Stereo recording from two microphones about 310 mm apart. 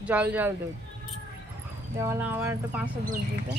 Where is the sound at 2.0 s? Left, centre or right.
Centre.